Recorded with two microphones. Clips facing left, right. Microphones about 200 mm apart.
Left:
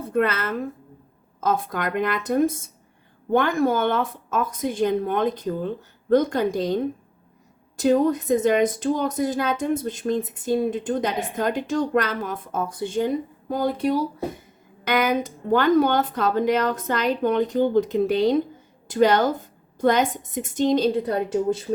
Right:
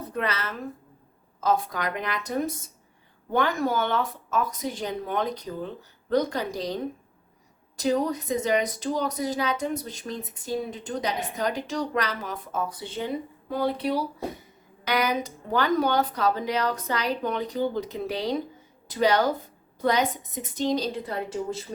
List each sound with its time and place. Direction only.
0.1 s a woman's voice: 55° left (ahead or behind)